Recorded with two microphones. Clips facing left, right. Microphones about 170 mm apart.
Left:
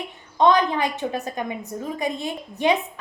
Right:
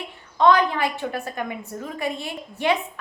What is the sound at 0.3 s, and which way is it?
A woman's voice, 20° left (ahead or behind).